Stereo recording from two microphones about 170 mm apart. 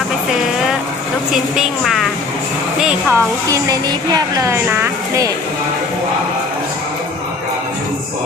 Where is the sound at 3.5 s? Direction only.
20° right (ahead or behind).